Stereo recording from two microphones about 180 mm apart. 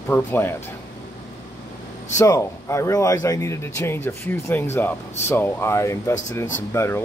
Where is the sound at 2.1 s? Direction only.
15° left (ahead or behind).